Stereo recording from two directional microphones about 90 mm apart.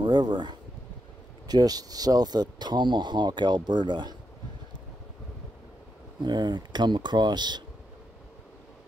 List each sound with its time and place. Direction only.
0.0 s speech: 50° right (ahead or behind)
6.2 s speech: 55° right (ahead or behind)